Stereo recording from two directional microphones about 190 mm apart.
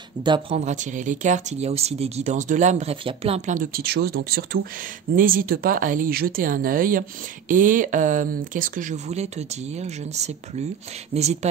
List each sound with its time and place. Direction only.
0.2 s speech: 25° right (ahead or behind)
0.6 s speech: 40° right (ahead or behind)